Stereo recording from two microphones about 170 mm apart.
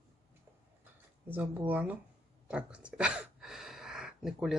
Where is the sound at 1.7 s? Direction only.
10° right (ahead or behind).